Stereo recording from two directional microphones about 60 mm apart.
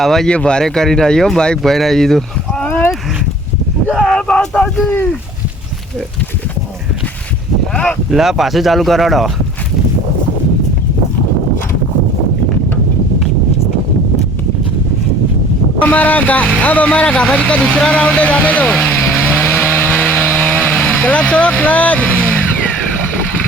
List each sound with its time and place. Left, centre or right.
0.0 s speech: centre
0.3 s speech: centre
4.0 s speech: centre
7.7 s speech: left
8.1 s speech: centre
15.8 s speech: left
18.9 s vehicle: left
20.2 s chainsaw: left
20.8 s speech: centre